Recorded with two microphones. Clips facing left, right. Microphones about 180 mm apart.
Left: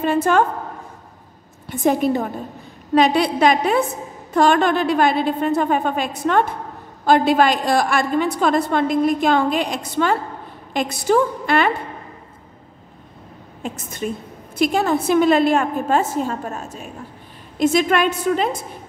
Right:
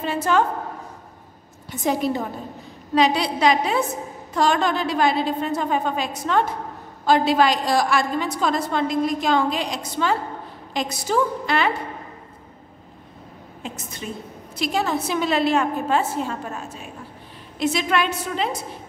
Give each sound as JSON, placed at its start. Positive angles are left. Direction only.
{"t": 0.0, "sound": "a woman's voice", "side_deg": 50}
{"t": 1.7, "sound": "a woman's voice", "side_deg": 55}
{"t": 13.6, "sound": "a woman's voice", "side_deg": 50}